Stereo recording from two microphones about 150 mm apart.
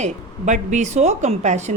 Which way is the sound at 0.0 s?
55° right (ahead or behind).